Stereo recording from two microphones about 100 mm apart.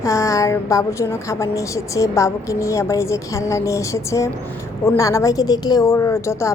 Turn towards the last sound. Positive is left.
turn(degrees=30)  # may be behind; listen again after turning